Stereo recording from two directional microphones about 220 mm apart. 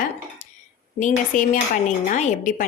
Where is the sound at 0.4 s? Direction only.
35° left (ahead or behind).